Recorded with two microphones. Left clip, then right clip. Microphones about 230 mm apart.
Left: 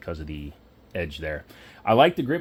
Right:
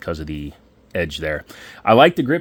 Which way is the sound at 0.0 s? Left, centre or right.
Right.